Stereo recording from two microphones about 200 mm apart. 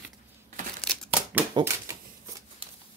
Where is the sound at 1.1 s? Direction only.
10° right (ahead or behind).